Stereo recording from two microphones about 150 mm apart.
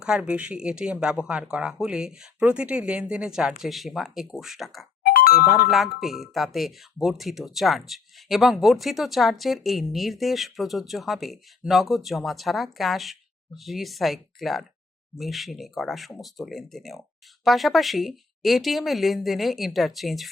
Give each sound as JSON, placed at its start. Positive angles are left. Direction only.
{"t": 0.0, "sound": "speech", "side_deg": -5}
{"t": 5.0, "sound": "music", "side_deg": 85}
{"t": 5.7, "sound": "speech", "side_deg": 0}